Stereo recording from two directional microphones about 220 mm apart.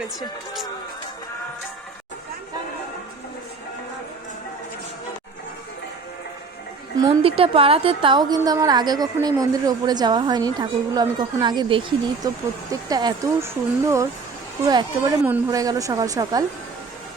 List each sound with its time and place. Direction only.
7.0 s a woman's voice: 25° right (ahead or behind)